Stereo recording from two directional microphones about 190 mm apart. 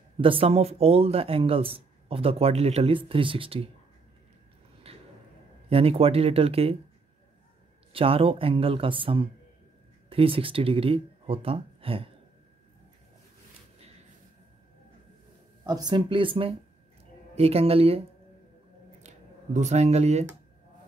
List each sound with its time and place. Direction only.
0.2 s speech: 30° right (ahead or behind)
4.9 s a sound: 30° right (ahead or behind)
5.7 s speech: 30° right (ahead or behind)
7.9 s speech: 30° right (ahead or behind)
15.6 s speech: 20° right (ahead or behind)
19.0 s speech: 40° right (ahead or behind)